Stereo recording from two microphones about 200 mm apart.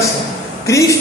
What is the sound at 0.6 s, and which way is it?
Speech, 15° left (ahead or behind).